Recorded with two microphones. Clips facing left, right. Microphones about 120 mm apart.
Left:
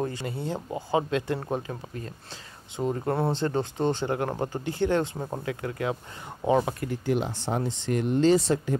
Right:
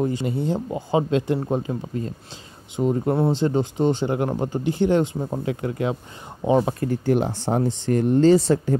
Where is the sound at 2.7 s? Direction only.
15° right (ahead or behind).